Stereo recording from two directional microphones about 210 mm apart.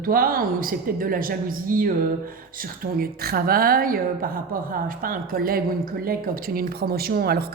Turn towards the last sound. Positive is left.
turn(degrees=-45)  # may be behind; listen again after turning